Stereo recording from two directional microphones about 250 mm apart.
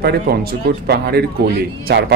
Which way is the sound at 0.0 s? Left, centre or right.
Right.